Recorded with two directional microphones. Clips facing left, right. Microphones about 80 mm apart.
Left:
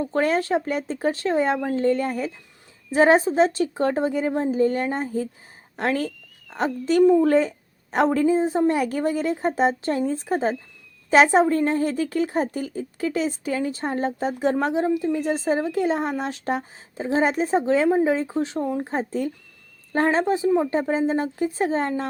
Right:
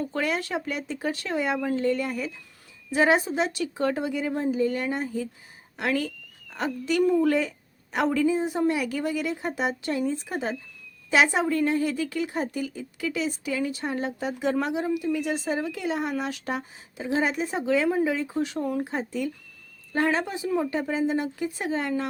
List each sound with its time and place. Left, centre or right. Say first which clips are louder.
0.0 s a woman's voice: left 6 dB; left
7.0 s speech: left 6 dB; left
7.3 s a woman's voice: left 5 dB; left